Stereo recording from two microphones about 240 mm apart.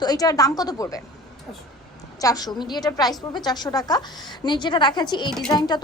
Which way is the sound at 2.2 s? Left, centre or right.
Centre.